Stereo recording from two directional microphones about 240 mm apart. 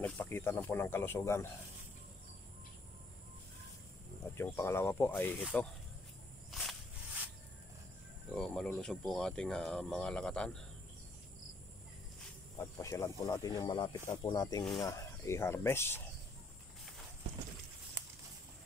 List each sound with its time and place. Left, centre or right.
0.0 s speech: centre
4.4 s speech: centre
6.5 s a sound: centre
8.4 s speech: centre
12.5 s speech: centre